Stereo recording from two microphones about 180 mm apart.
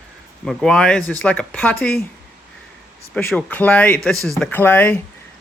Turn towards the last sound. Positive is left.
turn(degrees=10)  # may be behind; listen again after turning